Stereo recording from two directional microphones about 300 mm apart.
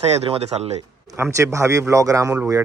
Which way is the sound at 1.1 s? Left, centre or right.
Centre.